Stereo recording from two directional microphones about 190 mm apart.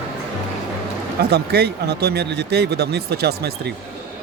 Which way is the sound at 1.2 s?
60° right (ahead or behind).